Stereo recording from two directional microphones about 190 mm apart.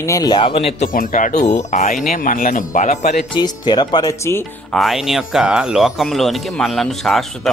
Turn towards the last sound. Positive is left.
turn(degrees=0)  # may be behind; listen again after turning